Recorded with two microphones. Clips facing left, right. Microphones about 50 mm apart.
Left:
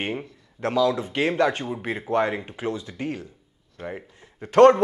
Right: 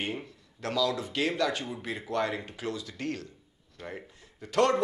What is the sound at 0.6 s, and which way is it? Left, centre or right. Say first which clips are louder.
Speech: left 7 dB; left.